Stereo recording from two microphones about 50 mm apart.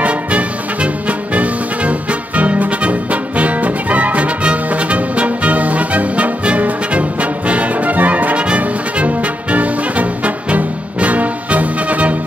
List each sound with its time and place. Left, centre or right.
0.0 s music: right